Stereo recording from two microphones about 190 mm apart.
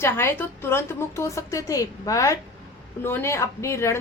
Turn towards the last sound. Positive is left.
turn(degrees=15)  # may be behind; listen again after turning